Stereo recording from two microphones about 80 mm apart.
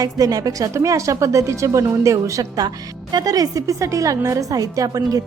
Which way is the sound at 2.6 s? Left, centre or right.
Right.